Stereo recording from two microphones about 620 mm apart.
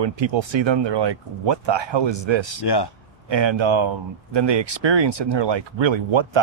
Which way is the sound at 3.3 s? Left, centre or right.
Right.